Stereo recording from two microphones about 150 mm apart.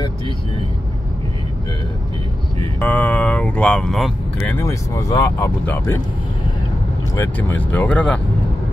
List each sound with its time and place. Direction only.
2.8 s vehicle: 10° left (ahead or behind)
4.5 s speech: 20° left (ahead or behind)
7.2 s speech: 15° left (ahead or behind)